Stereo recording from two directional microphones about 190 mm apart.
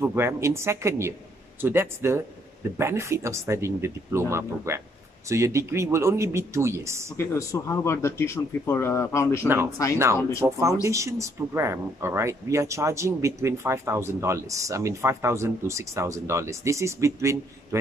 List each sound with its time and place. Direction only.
0.0 s speech: 15° right (ahead or behind)
7.2 s speech: 15° left (ahead or behind)
10.4 s speech: 15° right (ahead or behind)